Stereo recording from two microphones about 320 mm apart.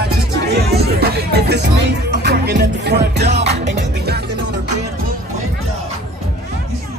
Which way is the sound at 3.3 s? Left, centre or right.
Centre.